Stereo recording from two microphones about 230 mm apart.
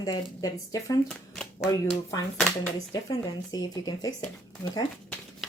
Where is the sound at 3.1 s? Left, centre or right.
Centre.